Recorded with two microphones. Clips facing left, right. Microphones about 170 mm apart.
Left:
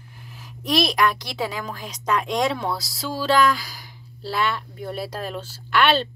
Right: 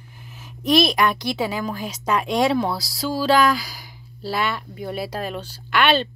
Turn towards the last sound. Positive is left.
turn(degrees=0)  # may be behind; listen again after turning